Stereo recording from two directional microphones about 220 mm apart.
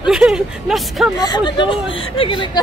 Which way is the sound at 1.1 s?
20° left (ahead or behind).